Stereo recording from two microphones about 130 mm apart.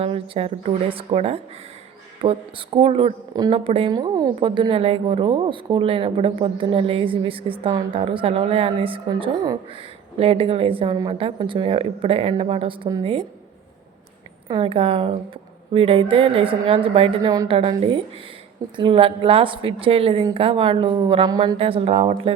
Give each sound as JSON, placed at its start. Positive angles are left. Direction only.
{"t": 0.0, "sound": "a woman's voice", "side_deg": -50}
{"t": 3.9, "sound": "a woman's voice", "side_deg": -30}
{"t": 10.2, "sound": "a woman's voice", "side_deg": -45}
{"t": 14.4, "sound": "a woman's voice", "side_deg": -40}
{"t": 17.2, "sound": "a woman's voice", "side_deg": -30}
{"t": 17.5, "sound": "a woman's voice", "side_deg": -45}
{"t": 21.6, "sound": "a woman's voice", "side_deg": -45}